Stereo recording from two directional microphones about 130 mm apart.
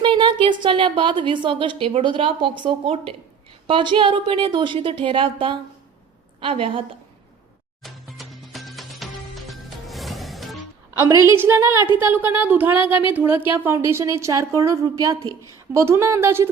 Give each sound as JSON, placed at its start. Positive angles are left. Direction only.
{"t": 0.0, "sound": "a woman's voice", "side_deg": -40}
{"t": 7.8, "sound": "music", "side_deg": 0}
{"t": 11.3, "sound": "a woman's voice", "side_deg": -20}